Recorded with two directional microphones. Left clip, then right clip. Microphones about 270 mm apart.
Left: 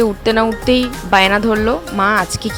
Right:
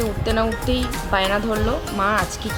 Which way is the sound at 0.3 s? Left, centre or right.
Left.